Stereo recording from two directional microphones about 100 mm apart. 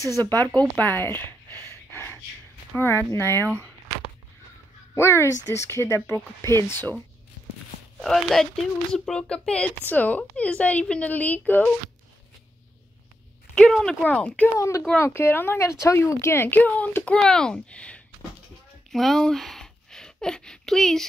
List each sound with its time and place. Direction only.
0.0 s speech: 35° right (ahead or behind)
0.5 s a sound: 15° left (ahead or behind)
2.7 s speech: 25° left (ahead or behind)
4.9 s speech: 25° left (ahead or behind)
8.0 s a woman's voice: 5° left (ahead or behind)
13.6 s speech: 5° left (ahead or behind)
14.0 s a woman's voice: 15° left (ahead or behind)
15.0 s a woman's voice: 25° left (ahead or behind)
18.9 s a sound: centre (ahead or behind)